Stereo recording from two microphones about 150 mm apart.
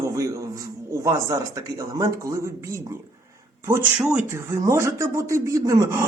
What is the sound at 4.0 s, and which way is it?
Speech, 5° right (ahead or behind).